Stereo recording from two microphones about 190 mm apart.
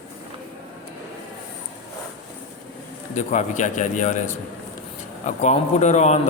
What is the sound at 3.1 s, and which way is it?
A man's voice, 40° left (ahead or behind).